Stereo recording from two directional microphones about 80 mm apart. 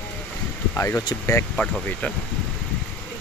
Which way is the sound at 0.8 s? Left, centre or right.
Left.